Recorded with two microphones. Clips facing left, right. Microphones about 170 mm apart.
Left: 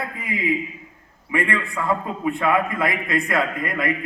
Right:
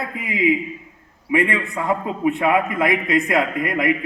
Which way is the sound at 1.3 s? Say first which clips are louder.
Right 3 dB; 20° right (ahead or behind).